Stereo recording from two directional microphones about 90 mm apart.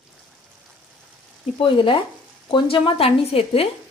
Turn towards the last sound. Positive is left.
turn(degrees=90)